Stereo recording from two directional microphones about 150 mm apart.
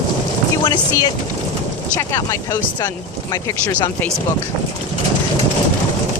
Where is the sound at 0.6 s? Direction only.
30° left (ahead or behind).